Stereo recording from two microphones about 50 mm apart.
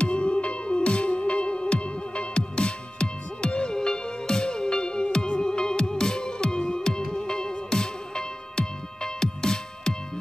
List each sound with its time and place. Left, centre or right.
0.0 s music: left